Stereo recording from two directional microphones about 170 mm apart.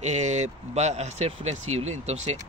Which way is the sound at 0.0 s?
45° right (ahead or behind).